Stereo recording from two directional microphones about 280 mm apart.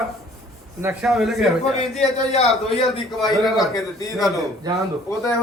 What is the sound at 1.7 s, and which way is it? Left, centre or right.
A man's voice, left.